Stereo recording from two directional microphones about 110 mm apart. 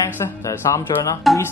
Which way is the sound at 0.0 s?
25° left (ahead or behind).